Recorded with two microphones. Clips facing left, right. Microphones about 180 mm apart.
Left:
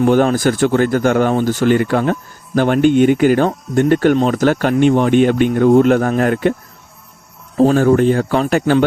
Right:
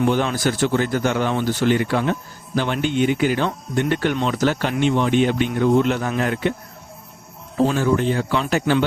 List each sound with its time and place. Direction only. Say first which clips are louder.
0.0 s speech: left 7 dB; 45° left (ahead or behind)
7.5 s speech: left 7 dB; 45° left (ahead or behind)